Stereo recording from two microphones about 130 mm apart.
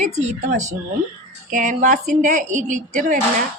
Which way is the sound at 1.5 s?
80° right.